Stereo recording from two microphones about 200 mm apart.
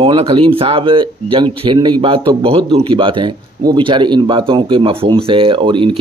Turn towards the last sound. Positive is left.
turn(degrees=-25)  # may be behind; listen again after turning